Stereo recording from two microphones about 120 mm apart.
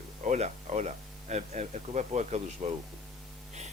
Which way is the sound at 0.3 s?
75° right (ahead or behind).